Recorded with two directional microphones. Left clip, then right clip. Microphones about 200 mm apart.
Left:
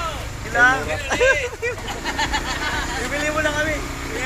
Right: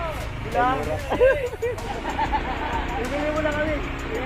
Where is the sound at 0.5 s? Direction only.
5° left (ahead or behind).